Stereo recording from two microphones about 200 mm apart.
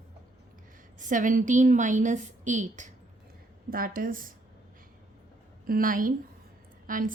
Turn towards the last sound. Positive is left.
turn(degrees=-45)  # may be behind; listen again after turning